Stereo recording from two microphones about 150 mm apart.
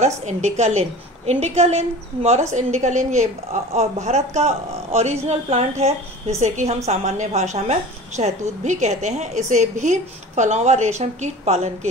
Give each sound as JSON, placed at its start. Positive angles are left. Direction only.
{"t": 0.0, "sound": "a woman's voice", "side_deg": -50}